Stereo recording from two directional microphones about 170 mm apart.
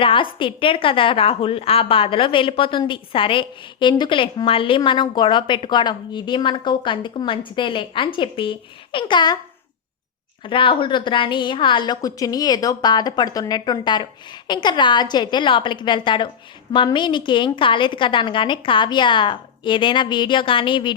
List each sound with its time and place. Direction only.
0.0 s a woman's voice: 30° left (ahead or behind)
10.4 s a woman's voice: 30° left (ahead or behind)